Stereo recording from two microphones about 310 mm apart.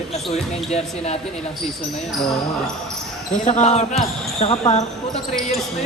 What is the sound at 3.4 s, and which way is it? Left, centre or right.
Speech, left.